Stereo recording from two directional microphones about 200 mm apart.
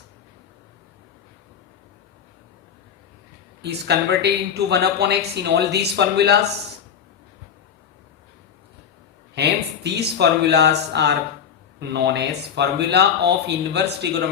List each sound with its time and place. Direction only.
3.6 s speech: 55° right (ahead or behind)
9.3 s speech: 60° right (ahead or behind)